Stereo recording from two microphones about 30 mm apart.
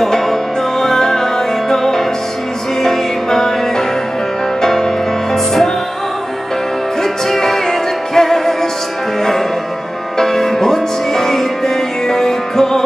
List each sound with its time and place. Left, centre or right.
0.0 s music: centre
7.2 s music: centre
10.1 s music: centre